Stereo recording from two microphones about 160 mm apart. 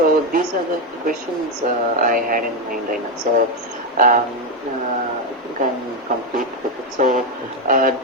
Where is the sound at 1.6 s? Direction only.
45° right (ahead or behind).